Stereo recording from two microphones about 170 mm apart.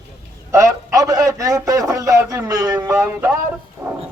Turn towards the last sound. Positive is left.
turn(degrees=-15)  # may be behind; listen again after turning